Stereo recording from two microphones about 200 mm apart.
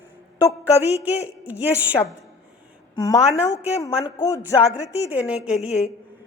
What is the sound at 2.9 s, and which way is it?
A woman's voice, 15° left (ahead or behind).